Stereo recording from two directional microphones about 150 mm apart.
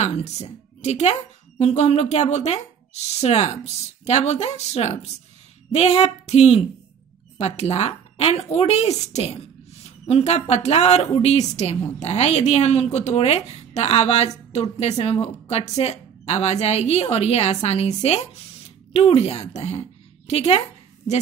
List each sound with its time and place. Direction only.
0.0 s a woman's voice: 50° left (ahead or behind)